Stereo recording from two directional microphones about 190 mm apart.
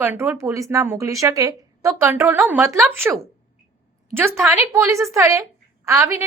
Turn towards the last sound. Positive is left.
turn(degrees=-15)  # may be behind; listen again after turning